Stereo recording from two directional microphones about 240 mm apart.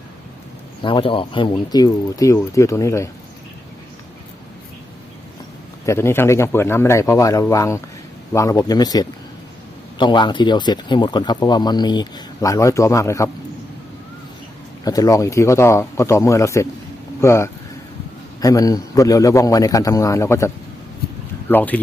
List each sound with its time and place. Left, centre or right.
0.8 s speech: left
5.8 s speech: centre
14.8 s speech: centre
21.5 s speech: centre